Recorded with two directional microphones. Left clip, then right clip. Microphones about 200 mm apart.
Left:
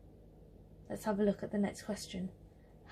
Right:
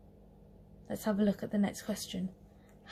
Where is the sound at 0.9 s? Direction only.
40° right (ahead or behind).